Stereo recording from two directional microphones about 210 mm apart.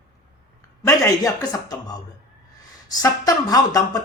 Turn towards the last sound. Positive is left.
turn(degrees=15)  # may be behind; listen again after turning